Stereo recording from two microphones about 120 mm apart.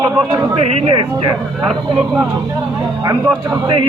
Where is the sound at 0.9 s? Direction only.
45° right (ahead or behind).